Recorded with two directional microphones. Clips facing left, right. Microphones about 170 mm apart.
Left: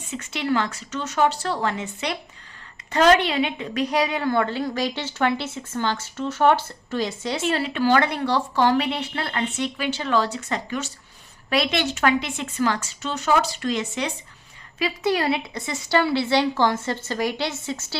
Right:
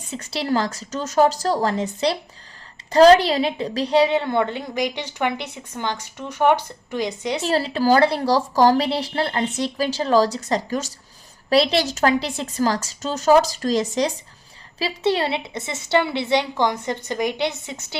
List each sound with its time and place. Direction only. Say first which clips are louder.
0.1 s a woman's voice: right 1 dB; 35° right (ahead or behind); by 7.4 s 20° right (ahead or behind)
7.4 s a woman's voice: right 2 dB; 35° right (ahead or behind); by 17.9 s 20° right (ahead or behind)